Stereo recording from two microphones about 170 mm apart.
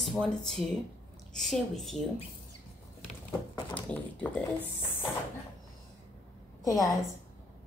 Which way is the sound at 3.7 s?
10° left (ahead or behind).